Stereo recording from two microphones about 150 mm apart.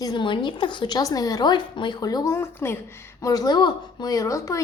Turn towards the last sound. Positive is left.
turn(degrees=20)  # may be behind; listen again after turning